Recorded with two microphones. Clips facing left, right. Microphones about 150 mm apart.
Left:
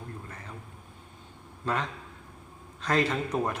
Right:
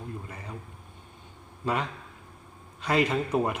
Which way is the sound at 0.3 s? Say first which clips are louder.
Right 2 dB; 10° right (ahead or behind).